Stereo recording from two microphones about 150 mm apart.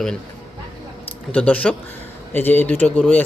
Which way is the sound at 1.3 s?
10° left (ahead or behind).